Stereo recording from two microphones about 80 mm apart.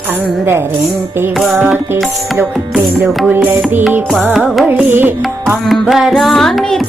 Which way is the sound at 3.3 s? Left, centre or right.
Right.